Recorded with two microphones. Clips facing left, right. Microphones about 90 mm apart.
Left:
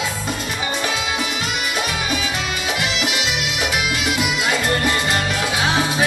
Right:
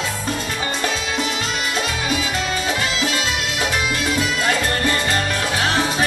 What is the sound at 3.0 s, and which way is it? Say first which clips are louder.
Music: even; 15° left (ahead or behind).